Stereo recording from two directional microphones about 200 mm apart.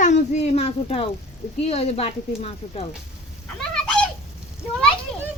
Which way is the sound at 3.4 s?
5° left (ahead or behind).